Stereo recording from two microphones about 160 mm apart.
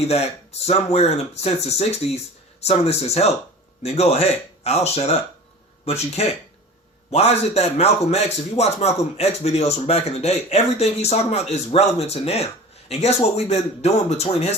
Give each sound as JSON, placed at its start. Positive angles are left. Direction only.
{"t": 0.0, "sound": "a man's voice", "side_deg": 40}